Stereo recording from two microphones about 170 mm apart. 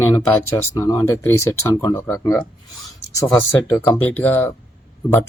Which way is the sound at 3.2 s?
5° left (ahead or behind).